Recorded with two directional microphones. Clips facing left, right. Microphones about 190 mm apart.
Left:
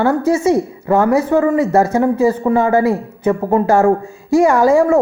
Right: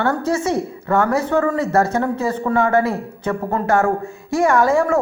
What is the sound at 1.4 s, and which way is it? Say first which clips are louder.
Speech: left 4 dB; 15° left (ahead or behind).